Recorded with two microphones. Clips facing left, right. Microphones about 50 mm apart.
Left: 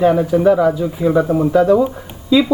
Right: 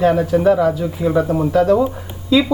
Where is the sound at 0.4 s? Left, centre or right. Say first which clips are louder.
Left 2 dB; centre.